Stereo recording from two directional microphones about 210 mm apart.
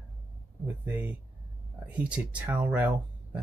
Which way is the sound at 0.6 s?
10° right (ahead or behind).